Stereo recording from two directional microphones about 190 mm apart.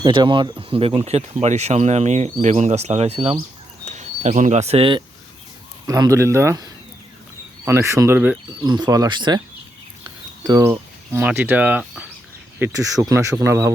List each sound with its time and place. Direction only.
0.0 s speech: 25° right (ahead or behind)
5.9 s speech: 15° right (ahead or behind)
8.6 s speech: 20° right (ahead or behind)
10.4 s speech: 20° right (ahead or behind)